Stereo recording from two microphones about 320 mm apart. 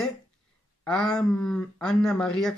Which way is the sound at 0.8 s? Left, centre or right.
Centre.